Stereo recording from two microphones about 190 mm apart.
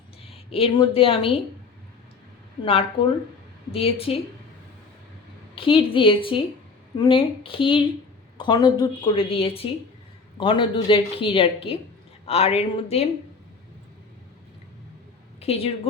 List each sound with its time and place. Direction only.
0.3 s a woman's voice: 30° left (ahead or behind)
3.0 s a woman's voice: 30° left (ahead or behind)
5.5 s a woman's voice: 30° left (ahead or behind)
15.4 s speech: 30° left (ahead or behind)